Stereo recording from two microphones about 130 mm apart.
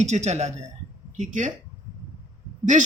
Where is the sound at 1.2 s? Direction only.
75° right (ahead or behind).